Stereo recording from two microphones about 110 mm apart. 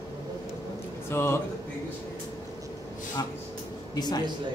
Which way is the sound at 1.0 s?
20° left (ahead or behind).